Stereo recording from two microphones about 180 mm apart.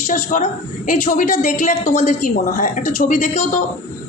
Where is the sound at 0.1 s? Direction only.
45° left (ahead or behind).